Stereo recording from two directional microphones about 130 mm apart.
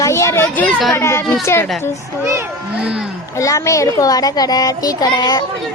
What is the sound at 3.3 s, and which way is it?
A child's voice, 25° left (ahead or behind).